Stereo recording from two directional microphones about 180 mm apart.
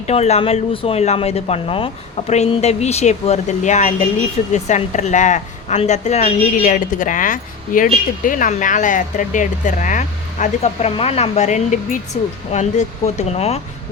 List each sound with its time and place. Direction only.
0.1 s speech: 35° left (ahead or behind)